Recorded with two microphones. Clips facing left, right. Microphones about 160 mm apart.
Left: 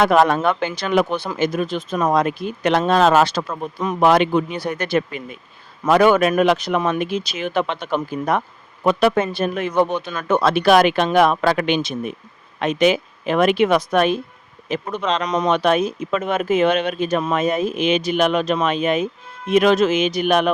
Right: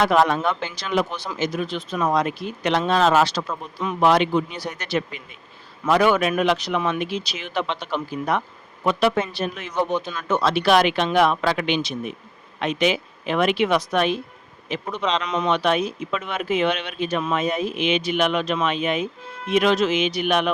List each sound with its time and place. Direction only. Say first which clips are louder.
0.0 s speech: left 3 dB; 50° left (ahead or behind)